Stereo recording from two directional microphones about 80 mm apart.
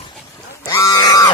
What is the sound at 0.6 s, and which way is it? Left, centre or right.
Pig, left.